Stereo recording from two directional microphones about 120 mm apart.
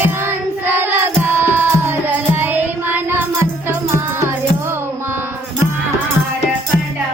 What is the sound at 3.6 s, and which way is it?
Music, 20° right (ahead or behind).